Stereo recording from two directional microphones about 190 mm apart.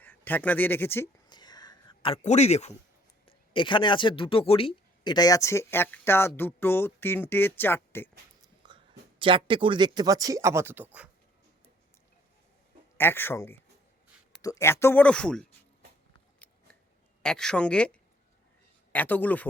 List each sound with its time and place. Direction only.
0.0 s speech: 10° left (ahead or behind)
1.3 s a sound: 20° left (ahead or behind)
3.2 s speech: 25° left (ahead or behind); by 8.1 s 10° left (ahead or behind)
8.6 s speech: 25° right (ahead or behind); by 11.1 s 10° right (ahead or behind)
13.0 s speech: 10° left (ahead or behind)
16.4 s scissors: 10° left (ahead or behind)
17.2 s speech: 5° left (ahead or behind)